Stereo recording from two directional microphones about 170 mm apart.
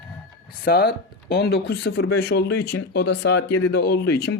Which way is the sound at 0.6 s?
65° left (ahead or behind).